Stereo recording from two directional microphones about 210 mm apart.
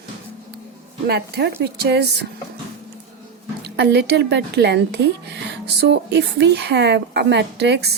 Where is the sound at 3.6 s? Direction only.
50° right (ahead or behind).